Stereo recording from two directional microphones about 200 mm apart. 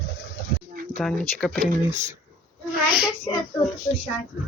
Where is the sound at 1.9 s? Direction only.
35° right (ahead or behind).